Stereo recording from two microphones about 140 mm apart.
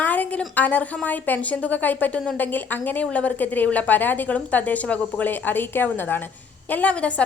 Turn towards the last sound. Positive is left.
turn(degrees=10)  # may be behind; listen again after turning